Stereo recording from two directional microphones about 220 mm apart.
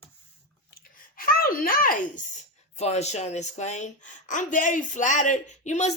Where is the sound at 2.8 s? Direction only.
30° left (ahead or behind).